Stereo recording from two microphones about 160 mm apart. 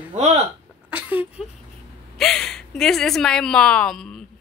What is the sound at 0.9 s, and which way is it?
Speech, 10° right (ahead or behind).